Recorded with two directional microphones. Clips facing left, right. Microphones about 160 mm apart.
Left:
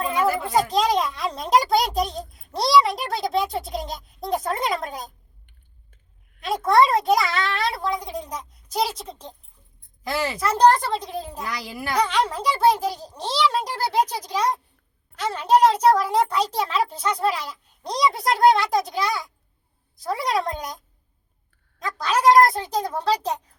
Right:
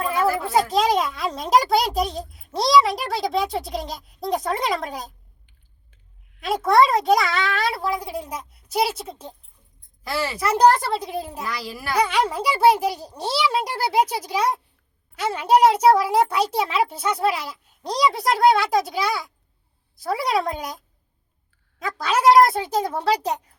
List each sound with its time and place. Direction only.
0.3 s a child's voice: 5° right (ahead or behind)
6.4 s a child's voice: centre (ahead or behind)
10.0 s a child's voice: 20° left (ahead or behind)
10.3 s a child's voice: 10° right (ahead or behind)
11.4 s a child's voice: 15° left (ahead or behind)
11.9 s a child's voice: 10° right (ahead or behind)